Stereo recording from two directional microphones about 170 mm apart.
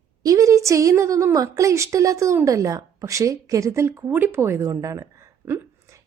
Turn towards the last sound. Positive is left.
turn(degrees=-15)  # may be behind; listen again after turning